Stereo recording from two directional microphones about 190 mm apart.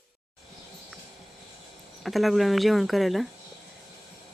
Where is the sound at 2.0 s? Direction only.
Centre (ahead or behind).